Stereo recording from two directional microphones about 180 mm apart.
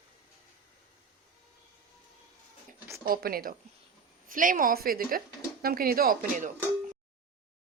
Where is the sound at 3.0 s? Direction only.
55° right (ahead or behind).